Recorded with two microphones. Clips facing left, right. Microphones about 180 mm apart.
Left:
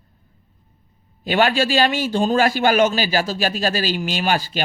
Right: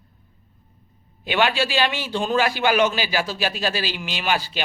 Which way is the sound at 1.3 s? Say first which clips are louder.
Left 4 dB; 45° left (ahead or behind).